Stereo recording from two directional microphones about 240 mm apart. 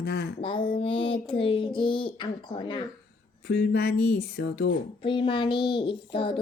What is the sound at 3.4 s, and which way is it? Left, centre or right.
Speech, left.